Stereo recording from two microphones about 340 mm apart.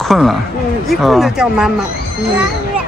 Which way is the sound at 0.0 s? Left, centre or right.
Centre.